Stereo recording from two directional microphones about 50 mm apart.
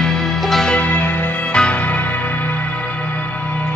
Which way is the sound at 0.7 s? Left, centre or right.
Left.